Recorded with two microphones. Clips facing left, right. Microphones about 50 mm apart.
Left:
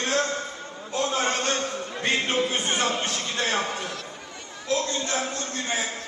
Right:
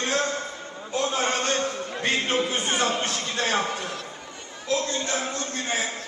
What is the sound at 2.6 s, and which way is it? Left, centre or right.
Music, right.